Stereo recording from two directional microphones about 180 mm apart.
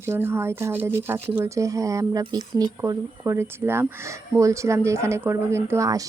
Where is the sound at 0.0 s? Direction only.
10° right (ahead or behind).